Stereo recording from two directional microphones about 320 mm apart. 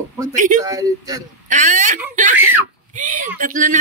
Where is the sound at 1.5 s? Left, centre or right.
Right.